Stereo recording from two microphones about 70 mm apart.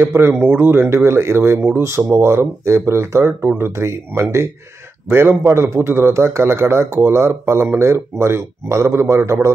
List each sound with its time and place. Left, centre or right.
0.0 s a man's voice: right